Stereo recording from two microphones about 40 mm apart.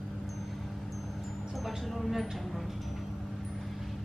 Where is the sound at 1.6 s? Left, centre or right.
Centre.